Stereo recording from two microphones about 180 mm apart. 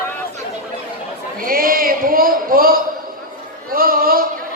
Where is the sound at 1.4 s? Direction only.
55° right (ahead or behind).